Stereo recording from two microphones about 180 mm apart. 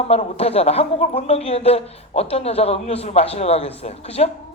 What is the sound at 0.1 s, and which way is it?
A woman's voice, 35° left (ahead or behind).